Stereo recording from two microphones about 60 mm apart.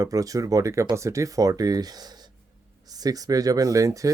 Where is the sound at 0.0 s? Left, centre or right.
Right.